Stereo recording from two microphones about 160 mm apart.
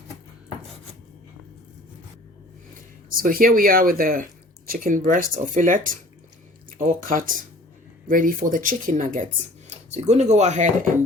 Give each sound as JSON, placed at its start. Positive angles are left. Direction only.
{"t": 3.2, "sound": "speech", "side_deg": -65}